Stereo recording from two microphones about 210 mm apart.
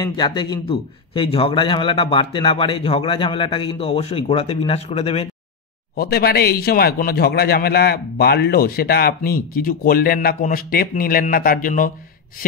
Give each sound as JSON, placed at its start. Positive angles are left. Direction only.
{"t": 0.1, "sound": "a man's voice", "side_deg": 20}
{"t": 5.9, "sound": "a man's voice", "side_deg": 45}